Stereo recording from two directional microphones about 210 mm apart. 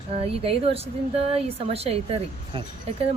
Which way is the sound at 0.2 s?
25° right (ahead or behind).